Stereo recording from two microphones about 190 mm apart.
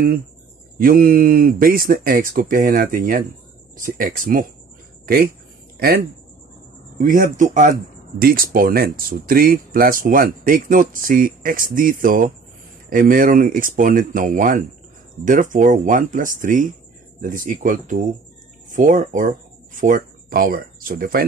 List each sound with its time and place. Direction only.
0.7 s speech: 50° right (ahead or behind)
7.0 s speech: 45° right (ahead or behind)